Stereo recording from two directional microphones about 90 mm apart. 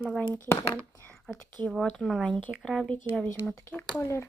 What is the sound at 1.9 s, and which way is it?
Speech, 5° left (ahead or behind).